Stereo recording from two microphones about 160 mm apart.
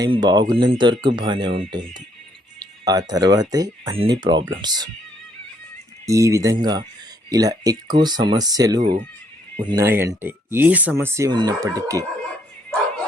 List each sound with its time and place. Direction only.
0.0 s speech: 25° right (ahead or behind)
3.1 s speech: 25° right (ahead or behind)
6.1 s speech: 20° right (ahead or behind)
8.8 s speech: 50° right (ahead or behind)
9.6 s speech: 15° right (ahead or behind)